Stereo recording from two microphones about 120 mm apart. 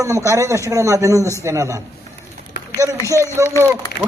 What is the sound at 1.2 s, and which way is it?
Speech, 20° left (ahead or behind).